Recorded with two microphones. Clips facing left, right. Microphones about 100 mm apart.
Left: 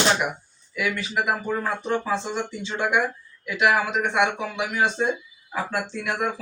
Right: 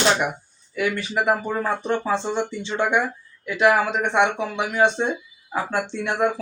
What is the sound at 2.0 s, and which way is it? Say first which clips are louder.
Speech: right 3 dB; 30° right (ahead or behind).